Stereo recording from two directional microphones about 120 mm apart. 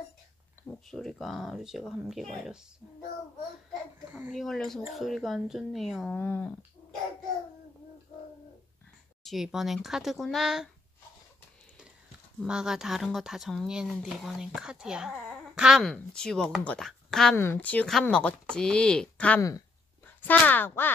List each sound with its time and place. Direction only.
0.8 s speech: 5° left (ahead or behind)
4.3 s speech: centre (ahead or behind)
6.1 s speech: 15° left (ahead or behind)
9.2 s speech: centre (ahead or behind)
12.4 s speech: 5° right (ahead or behind)
15.8 s speech: 5° left (ahead or behind)
17.4 s speech: 15° left (ahead or behind)